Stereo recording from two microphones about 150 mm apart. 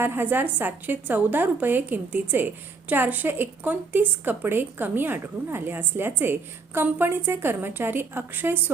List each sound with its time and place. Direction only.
0.0 s a woman's voice: 15° right (ahead or behind)